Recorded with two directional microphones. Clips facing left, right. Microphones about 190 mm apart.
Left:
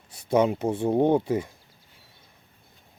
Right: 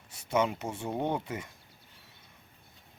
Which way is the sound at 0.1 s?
35° left (ahead or behind).